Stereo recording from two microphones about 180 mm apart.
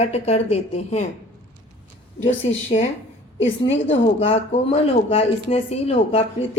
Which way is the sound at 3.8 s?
35° left (ahead or behind).